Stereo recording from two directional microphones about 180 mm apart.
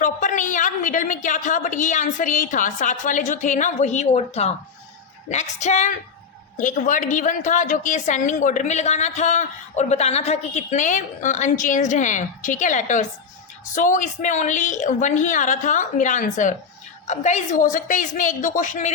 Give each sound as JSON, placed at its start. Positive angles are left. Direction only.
{"t": 0.0, "sound": "a woman's voice", "side_deg": 45}